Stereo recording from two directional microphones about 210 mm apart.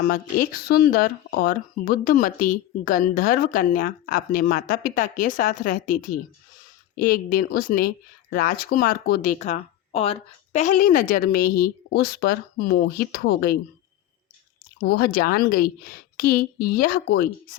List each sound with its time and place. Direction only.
0.1 s speech: 45° left (ahead or behind)
14.8 s speech: 45° left (ahead or behind)